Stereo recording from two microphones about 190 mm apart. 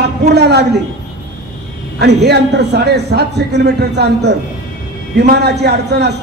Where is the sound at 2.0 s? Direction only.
60° right (ahead or behind).